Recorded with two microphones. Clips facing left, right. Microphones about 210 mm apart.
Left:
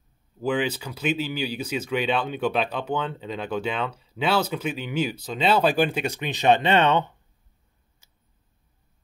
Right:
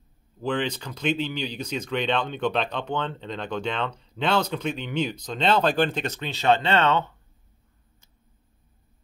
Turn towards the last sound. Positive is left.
turn(degrees=15)  # may be behind; listen again after turning